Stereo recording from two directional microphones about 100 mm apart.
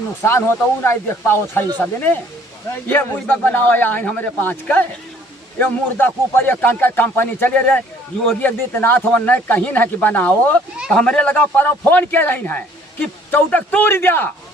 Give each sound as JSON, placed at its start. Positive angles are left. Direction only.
{"t": 0.2, "sound": "a man's voice", "side_deg": 25}